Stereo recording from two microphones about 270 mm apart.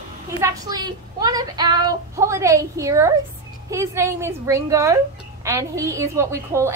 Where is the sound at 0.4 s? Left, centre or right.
Centre.